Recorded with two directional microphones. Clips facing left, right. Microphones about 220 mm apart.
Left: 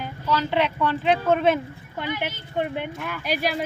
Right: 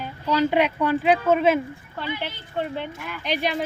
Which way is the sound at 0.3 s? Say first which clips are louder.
Right 3 dB; 15° right (ahead or behind).